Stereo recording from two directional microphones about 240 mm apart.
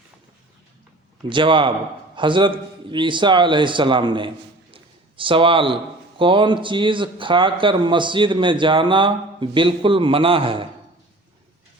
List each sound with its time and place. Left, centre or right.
1.3 s a man's voice: centre
4.7 s a sound: right
6.1 s a man's voice: right